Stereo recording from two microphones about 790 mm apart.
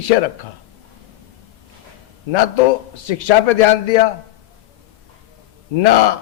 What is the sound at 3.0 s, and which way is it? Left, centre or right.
Speech, left.